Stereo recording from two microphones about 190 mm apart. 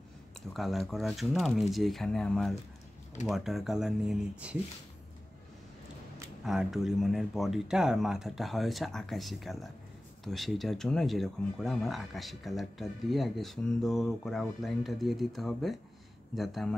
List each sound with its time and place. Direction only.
0.5 s speech: centre (ahead or behind)
6.4 s speech: centre (ahead or behind)